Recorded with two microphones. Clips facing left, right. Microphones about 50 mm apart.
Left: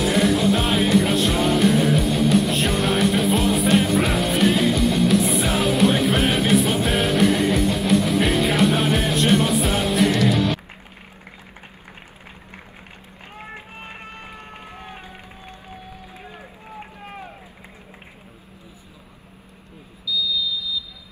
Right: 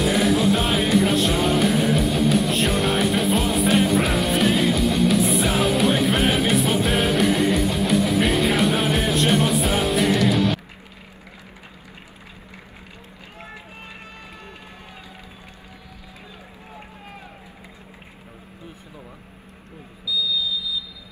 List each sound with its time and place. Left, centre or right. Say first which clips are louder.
0.0 s music: even; centre
17.0 s run: left 4 dB; left